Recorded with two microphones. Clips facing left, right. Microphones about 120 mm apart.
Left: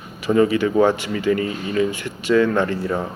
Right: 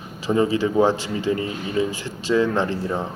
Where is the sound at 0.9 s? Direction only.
60° left (ahead or behind).